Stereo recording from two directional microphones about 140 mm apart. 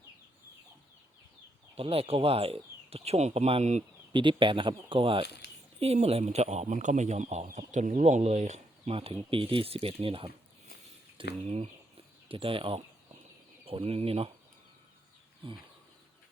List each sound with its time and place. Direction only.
1.7 s speech: 45° right (ahead or behind)
4.1 s speech: 35° right (ahead or behind)